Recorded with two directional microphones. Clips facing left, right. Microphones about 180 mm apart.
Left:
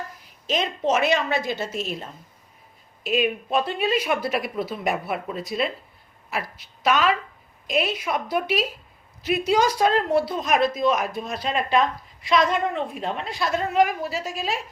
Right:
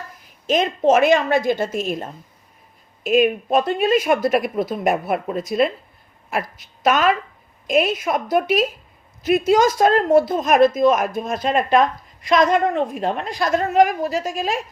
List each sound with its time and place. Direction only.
0.4 s a woman's voice: 50° right (ahead or behind)